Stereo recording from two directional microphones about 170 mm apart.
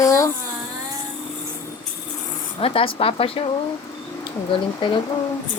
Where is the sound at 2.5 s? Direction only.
35° left (ahead or behind).